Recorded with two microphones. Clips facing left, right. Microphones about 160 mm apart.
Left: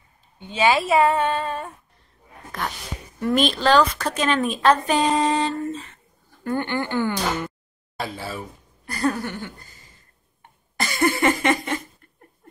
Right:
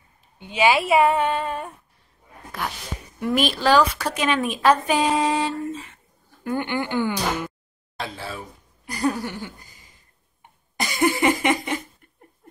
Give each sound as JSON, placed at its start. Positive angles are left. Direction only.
{"t": 0.5, "sound": "a woman's voice", "side_deg": -15}
{"t": 3.2, "sound": "a woman's voice", "side_deg": -5}
{"t": 8.8, "sound": "a woman's voice", "side_deg": -15}
{"t": 10.4, "sound": "a sound", "side_deg": -15}